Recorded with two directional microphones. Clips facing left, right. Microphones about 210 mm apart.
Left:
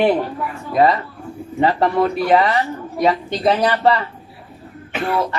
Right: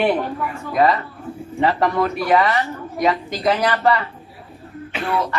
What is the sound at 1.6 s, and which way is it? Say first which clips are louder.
Speech: left 2 dB; 30° left (ahead or behind).